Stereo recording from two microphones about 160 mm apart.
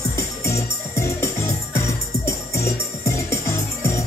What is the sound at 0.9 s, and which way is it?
Music, 15° left (ahead or behind).